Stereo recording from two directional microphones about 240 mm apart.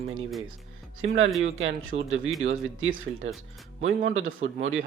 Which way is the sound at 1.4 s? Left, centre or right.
Right.